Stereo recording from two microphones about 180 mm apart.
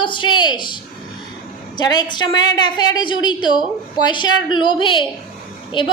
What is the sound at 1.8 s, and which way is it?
A woman's voice, 25° left (ahead or behind).